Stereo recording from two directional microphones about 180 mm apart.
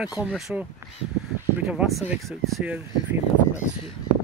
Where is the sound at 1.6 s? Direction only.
Centre (ahead or behind).